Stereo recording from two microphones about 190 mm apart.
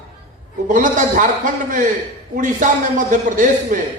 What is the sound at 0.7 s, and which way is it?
A man's voice, 40° right (ahead or behind).